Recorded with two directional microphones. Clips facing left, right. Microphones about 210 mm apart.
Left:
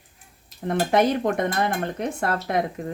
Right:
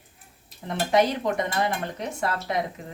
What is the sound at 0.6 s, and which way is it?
A woman's voice, 55° left (ahead or behind).